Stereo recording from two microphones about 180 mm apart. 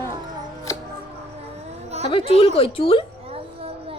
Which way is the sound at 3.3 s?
35° right (ahead or behind).